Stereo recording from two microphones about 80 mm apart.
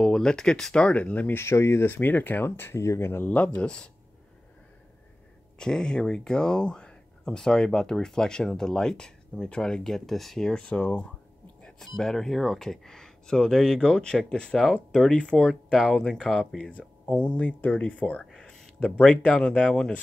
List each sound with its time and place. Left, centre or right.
0.0 s speech: centre
1.4 s speech: left
3.3 s speech: centre
5.6 s speech: centre
18.2 s a sound: centre
18.9 s speech: centre